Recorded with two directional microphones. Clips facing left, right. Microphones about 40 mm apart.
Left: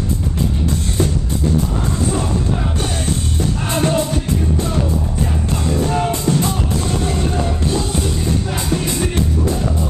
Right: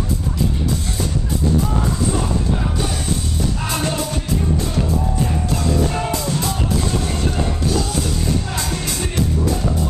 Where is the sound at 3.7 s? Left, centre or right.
Left.